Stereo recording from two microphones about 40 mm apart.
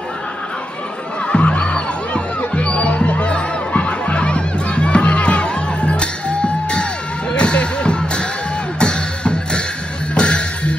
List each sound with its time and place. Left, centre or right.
1.2 s music: left